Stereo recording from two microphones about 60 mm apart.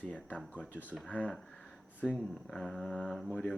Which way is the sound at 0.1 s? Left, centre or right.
Left.